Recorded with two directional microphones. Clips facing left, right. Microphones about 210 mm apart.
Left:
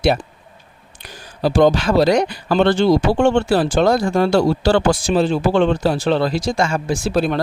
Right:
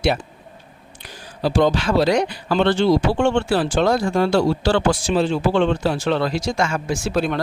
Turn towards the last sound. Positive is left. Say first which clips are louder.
# left 3 dB
turn(degrees=35)  # may be behind; listen again after turning